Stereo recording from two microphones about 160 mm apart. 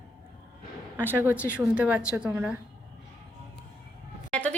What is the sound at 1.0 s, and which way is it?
Speech, 10° right (ahead or behind).